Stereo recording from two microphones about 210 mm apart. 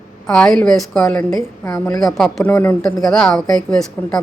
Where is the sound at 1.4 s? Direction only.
15° left (ahead or behind).